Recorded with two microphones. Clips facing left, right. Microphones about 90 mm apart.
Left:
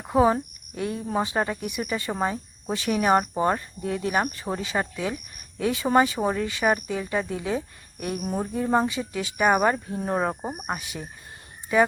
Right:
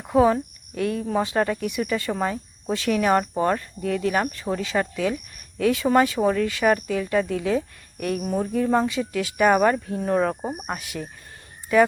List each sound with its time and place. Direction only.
0.0 s cricket: 5° left (ahead or behind)
1.2 s speech: 10° left (ahead or behind)